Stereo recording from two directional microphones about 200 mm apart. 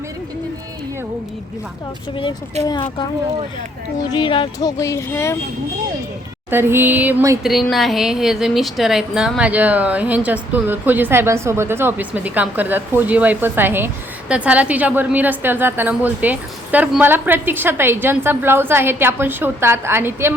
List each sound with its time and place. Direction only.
2.6 s speech: 35° right (ahead or behind)
4.1 s speech: 25° left (ahead or behind)
6.5 s a woman's voice: 10° right (ahead or behind)
7.4 s a woman's voice: centre (ahead or behind)